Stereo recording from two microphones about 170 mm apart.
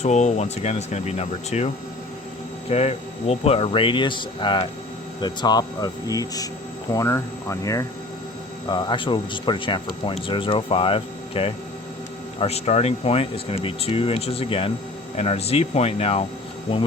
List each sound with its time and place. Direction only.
0.0 s speech: 45° left (ahead or behind)